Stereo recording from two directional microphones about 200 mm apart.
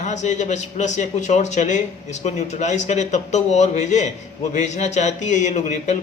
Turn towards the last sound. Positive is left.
turn(degrees=35)  # may be behind; listen again after turning